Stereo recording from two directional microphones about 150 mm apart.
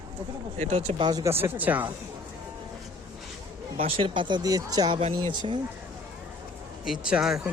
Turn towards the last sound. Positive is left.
turn(degrees=-5)  # may be behind; listen again after turning